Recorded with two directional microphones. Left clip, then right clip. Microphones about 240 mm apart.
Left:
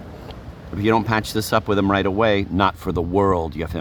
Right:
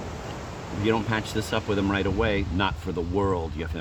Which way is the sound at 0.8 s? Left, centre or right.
Left.